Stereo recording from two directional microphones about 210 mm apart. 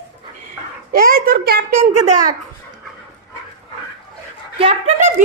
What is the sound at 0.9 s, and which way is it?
Speech, 45° right (ahead or behind).